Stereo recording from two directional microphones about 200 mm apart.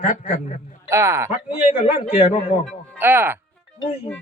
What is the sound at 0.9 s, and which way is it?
Speech, 15° right (ahead or behind).